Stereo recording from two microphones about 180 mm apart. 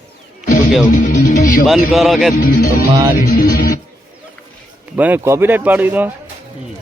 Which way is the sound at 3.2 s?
55° left (ahead or behind).